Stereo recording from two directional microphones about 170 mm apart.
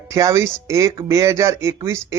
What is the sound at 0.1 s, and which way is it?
Speech, 15° right (ahead or behind).